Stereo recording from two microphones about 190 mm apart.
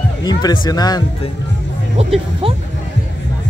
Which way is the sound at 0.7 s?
20° left (ahead or behind).